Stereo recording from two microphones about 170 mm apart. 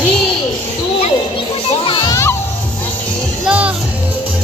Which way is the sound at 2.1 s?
15° left (ahead or behind).